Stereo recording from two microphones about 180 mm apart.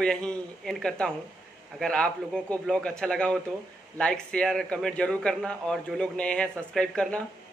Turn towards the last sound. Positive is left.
turn(degrees=5)  # may be behind; listen again after turning